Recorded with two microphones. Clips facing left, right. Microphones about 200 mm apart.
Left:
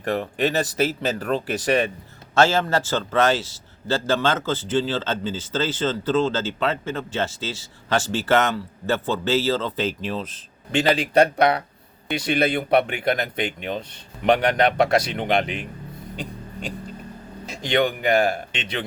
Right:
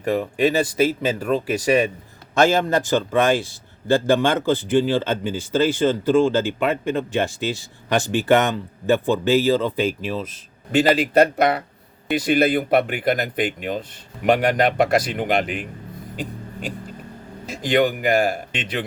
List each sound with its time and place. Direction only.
0.0 s a man's voice: 10° right (ahead or behind)
15.1 s speech: 5° right (ahead or behind)
16.1 s a sound: 5° right (ahead or behind)
17.5 s a man's voice: 5° right (ahead or behind)